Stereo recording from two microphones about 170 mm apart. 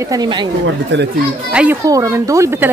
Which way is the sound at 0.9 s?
90° right.